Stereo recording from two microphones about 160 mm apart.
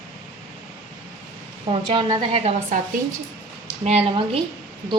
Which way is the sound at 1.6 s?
30° right (ahead or behind).